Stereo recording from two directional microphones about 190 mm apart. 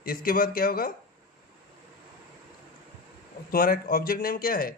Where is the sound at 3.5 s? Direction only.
50° left (ahead or behind).